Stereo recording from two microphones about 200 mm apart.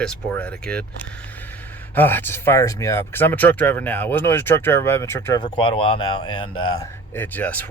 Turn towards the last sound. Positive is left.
turn(degrees=10)  # may be behind; listen again after turning